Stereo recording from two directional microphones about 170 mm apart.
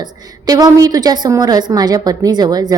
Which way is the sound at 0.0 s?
20° right (ahead or behind).